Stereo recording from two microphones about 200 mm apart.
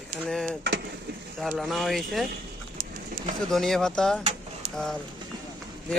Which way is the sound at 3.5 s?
Centre (ahead or behind).